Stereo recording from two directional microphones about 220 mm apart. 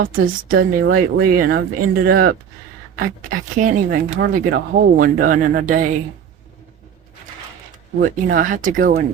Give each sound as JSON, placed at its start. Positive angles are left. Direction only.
{"t": 0.0, "sound": "speech", "side_deg": -40}
{"t": 7.9, "sound": "speech", "side_deg": -40}